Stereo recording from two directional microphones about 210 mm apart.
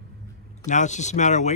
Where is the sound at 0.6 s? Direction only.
35° left (ahead or behind).